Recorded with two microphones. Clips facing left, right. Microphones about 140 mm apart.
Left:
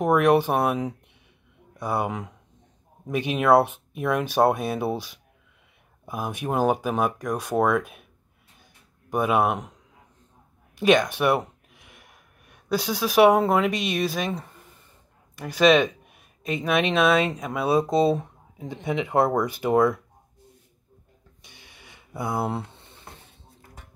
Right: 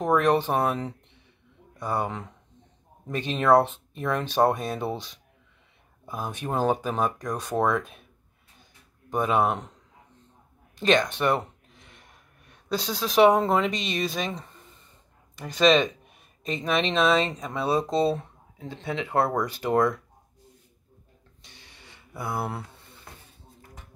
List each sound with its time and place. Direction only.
0.0 s speech: 10° left (ahead or behind)
9.1 s speech: 10° left (ahead or behind)
10.8 s speech: 10° left (ahead or behind)
21.4 s a sound: 15° left (ahead or behind)